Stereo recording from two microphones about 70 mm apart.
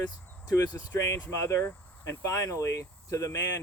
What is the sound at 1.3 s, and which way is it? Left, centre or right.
Speech, left.